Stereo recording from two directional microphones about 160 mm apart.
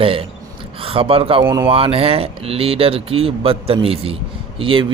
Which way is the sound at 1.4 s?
15° right (ahead or behind).